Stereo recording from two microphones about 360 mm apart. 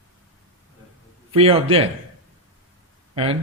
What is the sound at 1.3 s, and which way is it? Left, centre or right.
Speech, centre.